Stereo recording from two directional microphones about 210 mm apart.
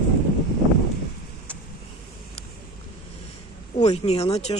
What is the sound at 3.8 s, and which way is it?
Speech, 30° left (ahead or behind).